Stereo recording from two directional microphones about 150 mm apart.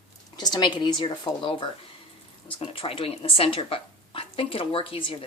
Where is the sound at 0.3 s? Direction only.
30° left (ahead or behind).